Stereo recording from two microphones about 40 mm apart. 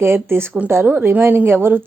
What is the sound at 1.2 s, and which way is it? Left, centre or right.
Speech, right.